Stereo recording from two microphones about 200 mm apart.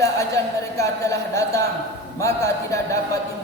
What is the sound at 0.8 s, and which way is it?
Speech, 15° left (ahead or behind).